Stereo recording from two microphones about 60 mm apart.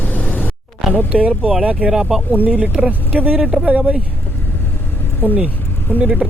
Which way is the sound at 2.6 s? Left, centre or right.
Centre.